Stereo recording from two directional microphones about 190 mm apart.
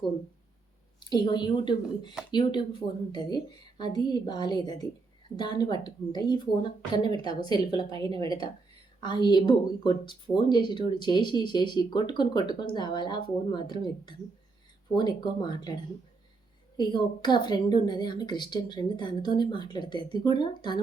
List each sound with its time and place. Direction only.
0.9 s speech: 25° left (ahead or behind)